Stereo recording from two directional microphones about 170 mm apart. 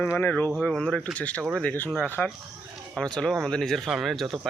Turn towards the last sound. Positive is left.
turn(degrees=0)  # may be behind; listen again after turning